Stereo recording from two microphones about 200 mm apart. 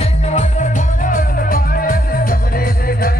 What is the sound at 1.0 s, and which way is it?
Music, 45° left (ahead or behind).